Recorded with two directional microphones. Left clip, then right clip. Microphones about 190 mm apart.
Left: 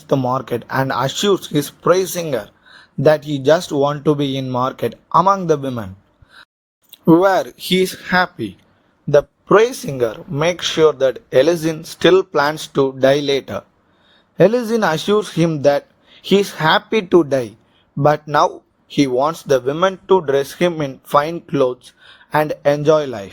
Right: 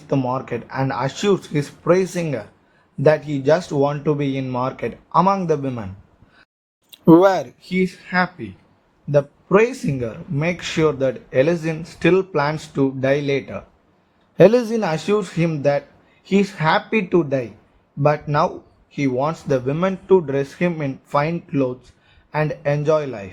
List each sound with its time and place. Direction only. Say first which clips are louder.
0.1 s speech: left 4 dB; 35° left (ahead or behind)
6.9 s speech: even; centre (ahead or behind)
7.7 s a man's voice: left 6 dB; 45° left (ahead or behind)
14.3 s a man's voice: even; centre (ahead or behind)
14.8 s a man's voice: left 4 dB; 45° left (ahead or behind)